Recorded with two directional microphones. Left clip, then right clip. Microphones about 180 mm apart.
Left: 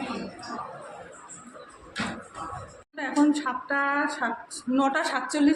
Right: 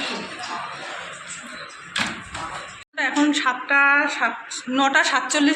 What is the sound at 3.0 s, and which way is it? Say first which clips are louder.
Speech: right 4 dB; 5° left (ahead or behind).